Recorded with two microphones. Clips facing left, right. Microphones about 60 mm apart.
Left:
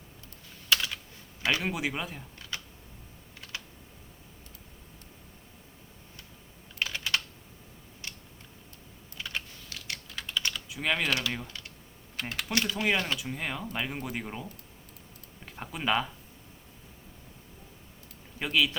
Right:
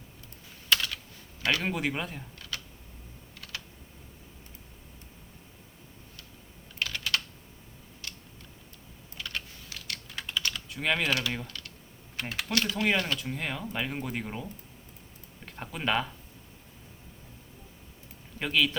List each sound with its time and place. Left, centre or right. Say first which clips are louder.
0.7 s computer keyboard: even; centre
1.4 s a sound: even; centre
1.6 s speech: right 1 dB; centre
6.7 s typing: even; centre
8.0 s a sound: left 1 dB; left
9.1 s typing: left 1 dB; centre
10.1 s typing: even; centre
10.5 s speech: right 2 dB; centre
11.4 s computer keyboard: right 1 dB; centre
12.1 s typing: right 1 dB; centre
12.7 s speech: right 1 dB; centre
18.3 s speech: even; centre